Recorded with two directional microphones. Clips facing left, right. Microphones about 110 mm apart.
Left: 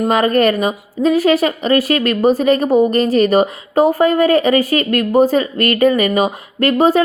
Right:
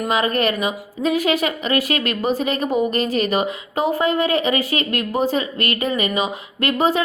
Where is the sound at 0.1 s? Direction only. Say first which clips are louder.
Left 5 dB; 45° left (ahead or behind).